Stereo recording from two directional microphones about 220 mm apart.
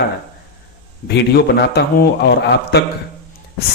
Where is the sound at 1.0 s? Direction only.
50° left (ahead or behind).